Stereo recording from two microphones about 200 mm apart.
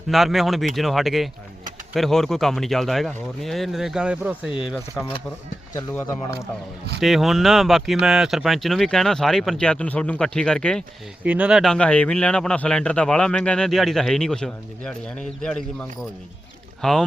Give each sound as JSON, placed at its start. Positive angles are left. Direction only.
{"t": 0.1, "sound": "speech", "side_deg": 0}
{"t": 5.7, "sound": "speech", "side_deg": 10}
{"t": 7.0, "sound": "speech", "side_deg": 0}
{"t": 11.2, "sound": "speech", "side_deg": -5}